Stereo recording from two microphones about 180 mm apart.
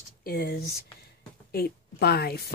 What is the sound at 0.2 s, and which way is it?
A woman's voice, 55° left (ahead or behind).